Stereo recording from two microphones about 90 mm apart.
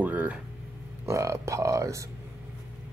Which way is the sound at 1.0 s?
35° right (ahead or behind).